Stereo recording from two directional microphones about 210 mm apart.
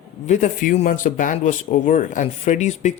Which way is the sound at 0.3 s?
35° left (ahead or behind).